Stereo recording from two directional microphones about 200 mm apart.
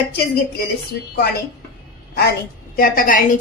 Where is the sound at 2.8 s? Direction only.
45° left (ahead or behind).